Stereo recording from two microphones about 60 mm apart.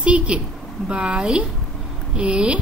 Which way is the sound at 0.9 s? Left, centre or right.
Centre.